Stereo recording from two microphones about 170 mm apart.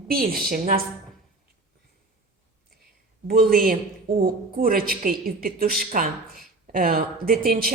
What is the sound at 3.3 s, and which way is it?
A woman's voice, 60° right (ahead or behind).